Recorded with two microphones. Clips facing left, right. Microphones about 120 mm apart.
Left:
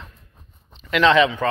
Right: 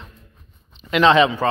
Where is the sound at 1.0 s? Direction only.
30° right (ahead or behind).